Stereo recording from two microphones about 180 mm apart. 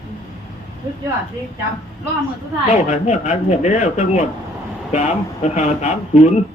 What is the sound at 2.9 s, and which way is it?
Speech, 40° left (ahead or behind).